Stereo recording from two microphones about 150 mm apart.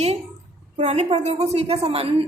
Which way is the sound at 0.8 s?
50° right (ahead or behind).